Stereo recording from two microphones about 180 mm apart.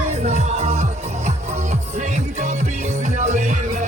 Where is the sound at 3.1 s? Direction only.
40° right (ahead or behind).